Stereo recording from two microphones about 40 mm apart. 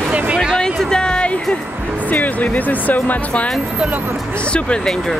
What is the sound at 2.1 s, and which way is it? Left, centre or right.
Speech, left.